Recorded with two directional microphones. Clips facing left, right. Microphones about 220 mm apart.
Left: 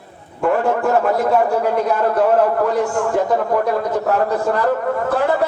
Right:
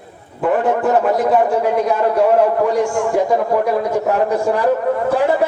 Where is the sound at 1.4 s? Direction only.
10° right (ahead or behind).